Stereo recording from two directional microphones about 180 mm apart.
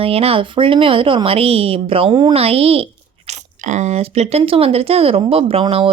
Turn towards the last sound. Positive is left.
turn(degrees=-30)  # may be behind; listen again after turning